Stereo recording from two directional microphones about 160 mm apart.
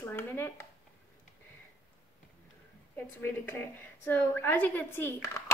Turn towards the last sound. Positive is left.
turn(degrees=15)  # may be behind; listen again after turning